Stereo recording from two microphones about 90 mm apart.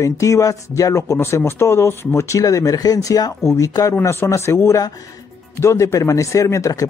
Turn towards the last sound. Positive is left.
turn(degrees=35)  # may be behind; listen again after turning